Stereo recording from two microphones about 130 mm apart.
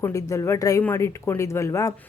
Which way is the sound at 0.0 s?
25° left (ahead or behind).